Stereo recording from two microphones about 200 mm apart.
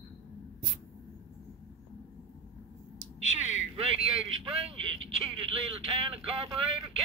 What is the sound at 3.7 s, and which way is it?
Speech, 30° right (ahead or behind).